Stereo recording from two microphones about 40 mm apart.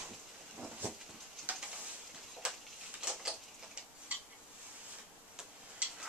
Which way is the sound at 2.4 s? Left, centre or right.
Right.